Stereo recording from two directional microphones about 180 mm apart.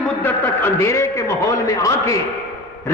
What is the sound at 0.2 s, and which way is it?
A man's voice, 10° left (ahead or behind).